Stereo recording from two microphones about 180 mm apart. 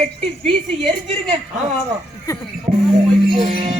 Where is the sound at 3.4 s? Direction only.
30° right (ahead or behind).